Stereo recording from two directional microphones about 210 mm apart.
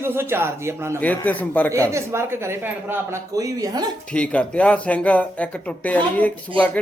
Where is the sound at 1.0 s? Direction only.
5° left (ahead or behind).